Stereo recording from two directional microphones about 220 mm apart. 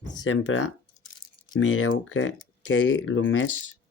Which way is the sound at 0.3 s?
60° left (ahead or behind).